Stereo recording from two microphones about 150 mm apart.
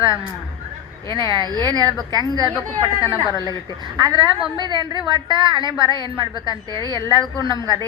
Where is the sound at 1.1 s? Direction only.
30° right (ahead or behind).